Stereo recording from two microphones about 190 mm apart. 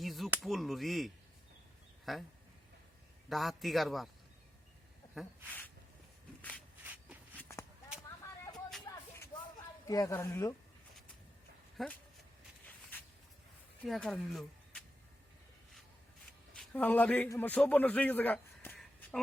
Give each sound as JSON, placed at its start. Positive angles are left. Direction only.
{"t": 0.0, "sound": "a man's voice", "side_deg": 0}
{"t": 3.2, "sound": "a man's voice", "side_deg": 0}
{"t": 5.2, "sound": "a man's voice", "side_deg": 0}
{"t": 6.8, "sound": "shuffle", "side_deg": -10}
{"t": 8.9, "sound": "a sound", "side_deg": 20}
{"t": 9.8, "sound": "a woman's voice", "side_deg": 20}
{"t": 11.8, "sound": "a man's voice", "side_deg": 0}
{"t": 13.8, "sound": "speech", "side_deg": 0}
{"t": 16.6, "sound": "a man's voice", "side_deg": 10}